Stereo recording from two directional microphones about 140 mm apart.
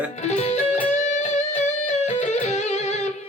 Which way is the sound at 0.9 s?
60° left (ahead or behind).